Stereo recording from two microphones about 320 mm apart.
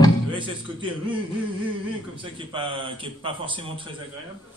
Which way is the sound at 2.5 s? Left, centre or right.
Centre.